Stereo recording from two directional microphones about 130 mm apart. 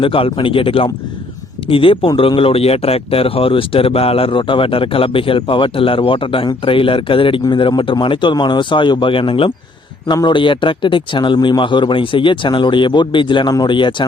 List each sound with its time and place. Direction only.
0.0 s speech: 45° left (ahead or behind)